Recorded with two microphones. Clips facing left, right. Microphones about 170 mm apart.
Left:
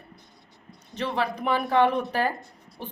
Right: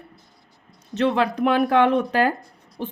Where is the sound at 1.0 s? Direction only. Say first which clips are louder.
Right 7 dB; 80° right.